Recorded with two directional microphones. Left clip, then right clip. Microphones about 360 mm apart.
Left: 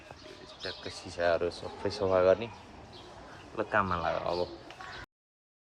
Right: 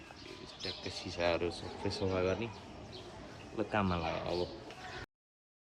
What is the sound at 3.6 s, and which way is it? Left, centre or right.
Speech, centre.